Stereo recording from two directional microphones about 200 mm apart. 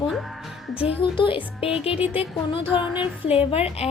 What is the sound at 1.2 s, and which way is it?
Speech, 25° left (ahead or behind).